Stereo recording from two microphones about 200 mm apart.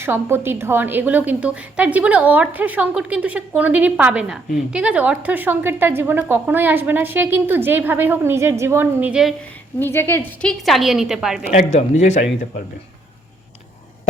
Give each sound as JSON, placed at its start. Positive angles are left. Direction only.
{"t": 0.0, "sound": "a woman's voice", "side_deg": -10}
{"t": 9.8, "sound": "a woman's voice", "side_deg": 10}
{"t": 11.5, "sound": "speech", "side_deg": 35}